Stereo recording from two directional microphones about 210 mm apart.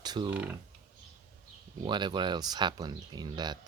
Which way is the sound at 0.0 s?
20° right (ahead or behind).